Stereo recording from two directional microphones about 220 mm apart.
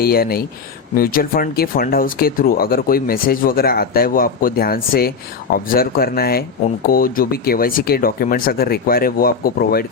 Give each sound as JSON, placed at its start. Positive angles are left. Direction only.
{"t": 0.0, "sound": "speech", "side_deg": 45}